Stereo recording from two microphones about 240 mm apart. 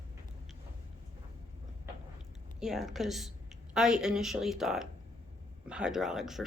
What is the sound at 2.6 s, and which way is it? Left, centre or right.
A woman's voice, centre.